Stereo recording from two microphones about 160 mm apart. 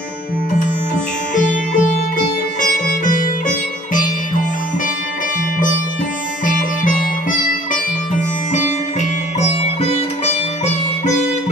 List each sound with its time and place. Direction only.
1.3 s music: 50° left (ahead or behind)
6.4 s music: 55° left (ahead or behind)
9.4 s sitar: 40° left (ahead or behind)